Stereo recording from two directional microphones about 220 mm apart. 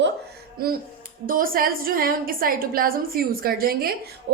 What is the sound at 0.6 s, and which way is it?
A woman's voice, 45° right (ahead or behind).